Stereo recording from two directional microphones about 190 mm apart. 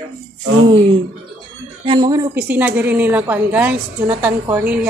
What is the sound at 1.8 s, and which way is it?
A woman's voice, 20° right (ahead or behind).